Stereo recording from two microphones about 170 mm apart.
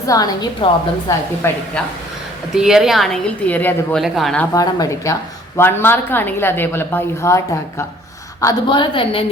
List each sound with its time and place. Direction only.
0.1 s a woman's voice: 20° left (ahead or behind)
2.6 s a woman's voice: 5° right (ahead or behind)
4.0 s a woman's voice: centre (ahead or behind)
4.5 s a woman's voice: 20° left (ahead or behind)